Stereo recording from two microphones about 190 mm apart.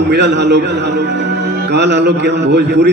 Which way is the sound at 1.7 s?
65° right (ahead or behind).